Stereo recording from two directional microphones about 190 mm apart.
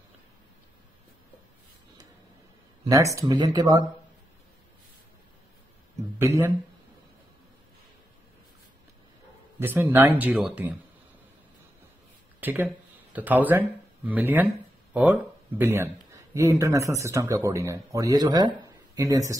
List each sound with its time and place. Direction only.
2.8 s speech: 15° right (ahead or behind)
6.1 s speech: 10° right (ahead or behind)
9.6 s speech: 10° right (ahead or behind)
12.4 s speech: 10° right (ahead or behind)